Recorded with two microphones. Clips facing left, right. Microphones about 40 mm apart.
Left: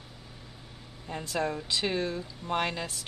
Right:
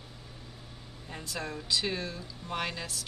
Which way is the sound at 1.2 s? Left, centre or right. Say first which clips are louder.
Left 7 dB; left.